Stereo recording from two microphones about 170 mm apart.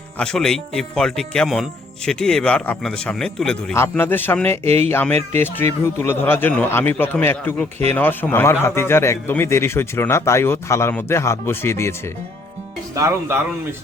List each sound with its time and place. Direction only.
0.2 s speech: 5° left (ahead or behind)
4.6 s speech: 40° right (ahead or behind)
4.9 s speech: 15° left (ahead or behind)
13.0 s speech: 15° right (ahead or behind)